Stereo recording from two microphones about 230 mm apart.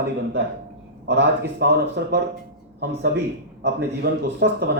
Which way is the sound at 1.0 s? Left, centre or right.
Right.